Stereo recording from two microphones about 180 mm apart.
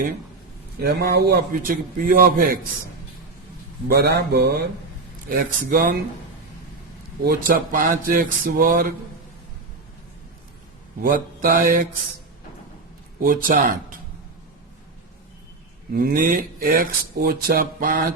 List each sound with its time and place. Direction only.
0.8 s speech: 65° right (ahead or behind)
3.8 s speech: 60° right (ahead or behind)
5.3 s speech: 55° right (ahead or behind)
7.3 s speech: 50° right (ahead or behind)
11.0 s speech: 50° right (ahead or behind)
13.2 s speech: 50° right (ahead or behind)
16.0 s speech: 55° right (ahead or behind)